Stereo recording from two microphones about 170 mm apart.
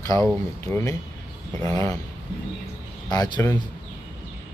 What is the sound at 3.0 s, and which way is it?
Speech, 25° left (ahead or behind).